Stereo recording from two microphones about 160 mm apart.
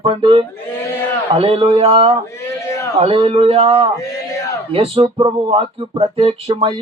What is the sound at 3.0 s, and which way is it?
Speech, 35° right (ahead or behind).